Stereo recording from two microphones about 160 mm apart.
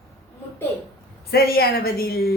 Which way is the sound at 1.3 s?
70° left (ahead or behind).